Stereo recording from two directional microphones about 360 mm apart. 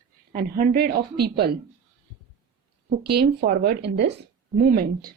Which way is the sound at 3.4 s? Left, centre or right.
Right.